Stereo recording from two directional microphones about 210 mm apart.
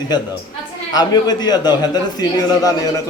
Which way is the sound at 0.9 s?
20° left (ahead or behind).